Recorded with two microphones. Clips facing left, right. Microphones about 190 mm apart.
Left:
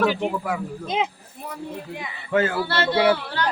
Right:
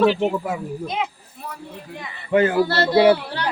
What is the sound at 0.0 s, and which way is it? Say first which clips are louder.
Speech: right 4 dB; 25° right (ahead or behind).